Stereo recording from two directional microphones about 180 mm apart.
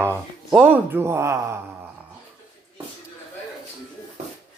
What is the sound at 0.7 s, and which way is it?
Speech, 15° right (ahead or behind).